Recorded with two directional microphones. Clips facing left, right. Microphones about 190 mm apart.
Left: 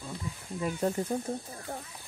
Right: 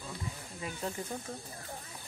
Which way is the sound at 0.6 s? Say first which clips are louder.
Left 9 dB; 45° left (ahead or behind).